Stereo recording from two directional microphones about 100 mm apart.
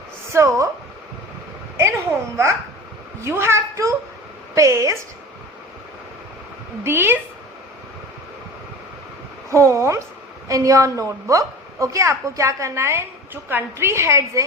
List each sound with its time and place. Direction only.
0.3 s a woman's voice: 30° right (ahead or behind)
1.7 s a sound: 25° right (ahead or behind)
3.2 s a woman's voice: 25° right (ahead or behind)
6.8 s a woman's voice: 25° right (ahead or behind)
9.5 s a woman's voice: 30° right (ahead or behind)